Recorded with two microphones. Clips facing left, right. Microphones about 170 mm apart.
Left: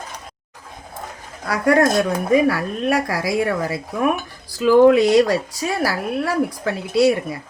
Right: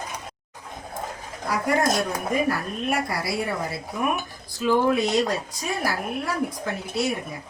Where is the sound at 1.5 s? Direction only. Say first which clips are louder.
Left 6 dB; 75° left (ahead or behind).